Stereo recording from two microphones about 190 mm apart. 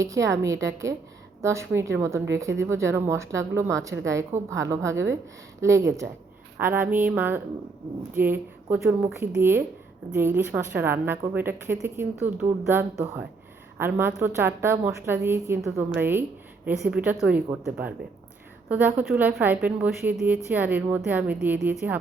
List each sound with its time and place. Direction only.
0.0 s a woman's voice: 15° right (ahead or behind)
18.7 s a woman's voice: 10° right (ahead or behind)